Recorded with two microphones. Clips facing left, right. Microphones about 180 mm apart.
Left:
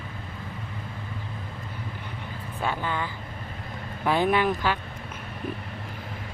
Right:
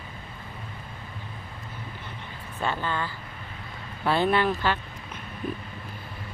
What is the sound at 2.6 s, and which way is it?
Speech, 10° left (ahead or behind).